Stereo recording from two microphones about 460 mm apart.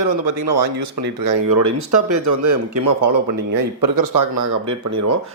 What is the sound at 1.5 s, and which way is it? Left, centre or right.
Speech, right.